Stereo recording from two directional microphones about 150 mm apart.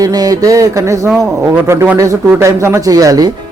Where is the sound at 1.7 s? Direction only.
15° right (ahead or behind).